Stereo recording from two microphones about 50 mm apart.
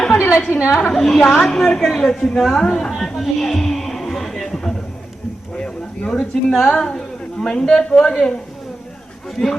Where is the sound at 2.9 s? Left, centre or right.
Centre.